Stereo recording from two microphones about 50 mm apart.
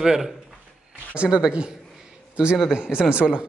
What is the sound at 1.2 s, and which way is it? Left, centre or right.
Speech, right.